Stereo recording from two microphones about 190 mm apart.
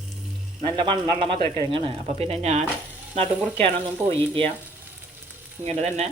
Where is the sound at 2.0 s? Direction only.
35° right (ahead or behind).